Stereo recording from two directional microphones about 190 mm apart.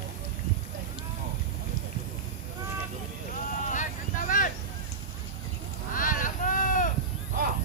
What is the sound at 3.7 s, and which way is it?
Clip-clop, 45° left (ahead or behind).